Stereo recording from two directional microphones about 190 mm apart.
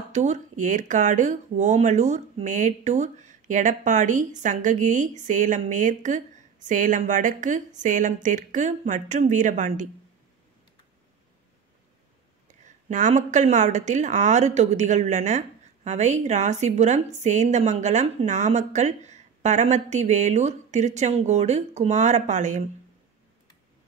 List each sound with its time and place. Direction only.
0.1 s speech: 40° right (ahead or behind)
12.4 s speech: 40° right (ahead or behind)